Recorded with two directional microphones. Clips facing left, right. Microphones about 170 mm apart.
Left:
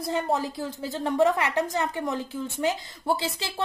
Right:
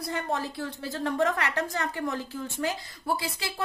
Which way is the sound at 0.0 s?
20° left (ahead or behind).